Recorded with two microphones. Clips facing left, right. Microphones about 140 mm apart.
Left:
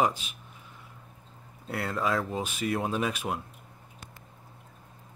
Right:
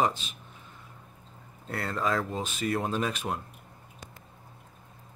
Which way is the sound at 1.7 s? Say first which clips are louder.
Even; 5° left (ahead or behind).